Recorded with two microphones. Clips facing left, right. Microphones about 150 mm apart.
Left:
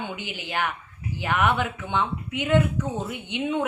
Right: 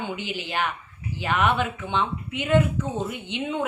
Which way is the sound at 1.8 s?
15° left (ahead or behind).